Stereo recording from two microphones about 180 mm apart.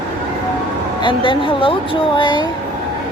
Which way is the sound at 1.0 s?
30° left (ahead or behind).